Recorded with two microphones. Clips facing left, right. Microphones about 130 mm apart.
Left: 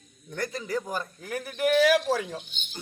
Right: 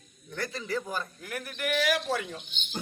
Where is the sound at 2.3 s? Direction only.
45° left (ahead or behind).